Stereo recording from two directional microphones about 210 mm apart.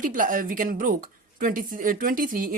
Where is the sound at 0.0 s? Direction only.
40° right (ahead or behind).